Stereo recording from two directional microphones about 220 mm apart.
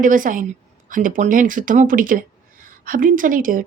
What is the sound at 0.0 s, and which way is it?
Speech, 40° right (ahead or behind).